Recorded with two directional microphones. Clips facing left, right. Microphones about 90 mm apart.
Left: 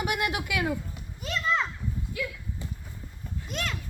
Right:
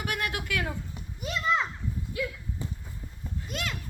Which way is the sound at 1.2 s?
15° right (ahead or behind).